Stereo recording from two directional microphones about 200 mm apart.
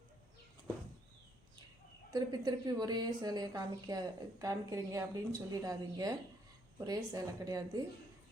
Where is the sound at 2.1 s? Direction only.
20° right (ahead or behind).